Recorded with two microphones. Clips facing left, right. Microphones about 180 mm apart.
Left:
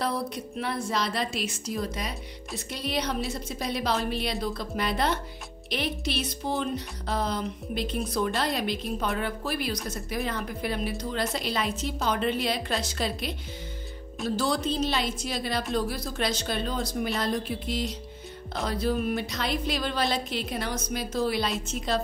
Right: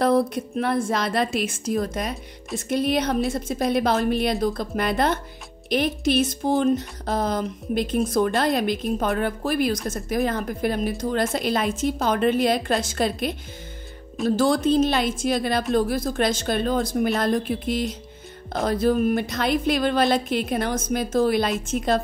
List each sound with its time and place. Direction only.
0.0 s speech: 50° right (ahead or behind)